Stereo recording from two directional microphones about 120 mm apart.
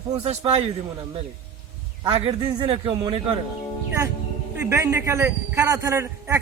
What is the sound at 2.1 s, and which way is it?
Speech, 55° right (ahead or behind).